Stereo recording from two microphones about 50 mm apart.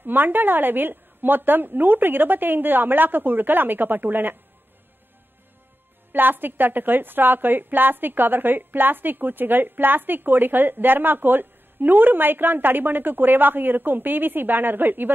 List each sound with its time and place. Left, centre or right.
0.0 s a woman's voice: right
6.1 s a woman's voice: right